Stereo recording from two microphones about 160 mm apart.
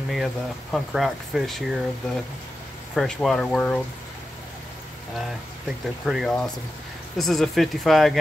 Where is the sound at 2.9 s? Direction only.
Centre (ahead or behind).